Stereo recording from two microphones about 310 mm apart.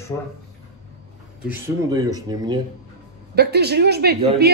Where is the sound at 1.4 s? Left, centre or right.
Centre.